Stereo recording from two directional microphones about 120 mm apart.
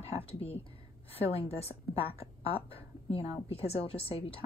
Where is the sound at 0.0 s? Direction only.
55° left (ahead or behind).